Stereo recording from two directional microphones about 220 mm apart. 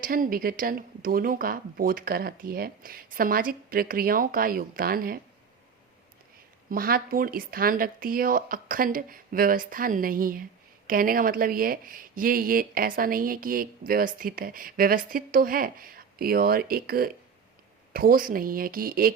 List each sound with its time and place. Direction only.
0.0 s speech: 40° right (ahead or behind)
6.7 s speech: 40° right (ahead or behind)